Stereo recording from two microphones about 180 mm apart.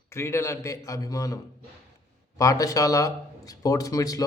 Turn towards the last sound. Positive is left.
turn(degrees=20)  # may be behind; listen again after turning